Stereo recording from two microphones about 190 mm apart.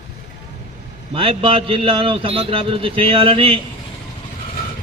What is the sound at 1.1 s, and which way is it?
A man's voice, 30° right (ahead or behind).